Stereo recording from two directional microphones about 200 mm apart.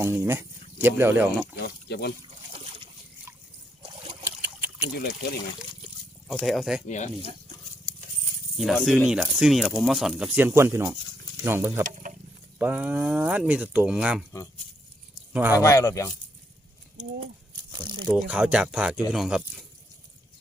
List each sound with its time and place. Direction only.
0.0 s speech: 10° right (ahead or behind)
1.6 s speech: 55° left (ahead or behind)
4.2 s a sound: 10° right (ahead or behind)
6.4 s speech: centre (ahead or behind)
6.8 s speech: 35° left (ahead or behind)
8.5 s speech: centre (ahead or behind)
15.3 s speech: 10° right (ahead or behind)
15.5 s speech: 15° left (ahead or behind)
17.7 s crumpling: 20° right (ahead or behind)
18.2 s speech: 5° right (ahead or behind)